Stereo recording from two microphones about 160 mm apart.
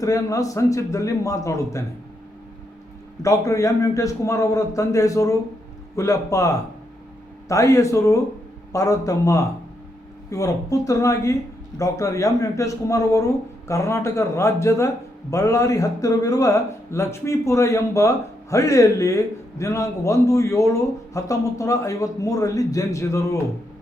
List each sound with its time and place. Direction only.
0.0 s a man's voice: 20° left (ahead or behind)
3.2 s a man's voice: 20° left (ahead or behind)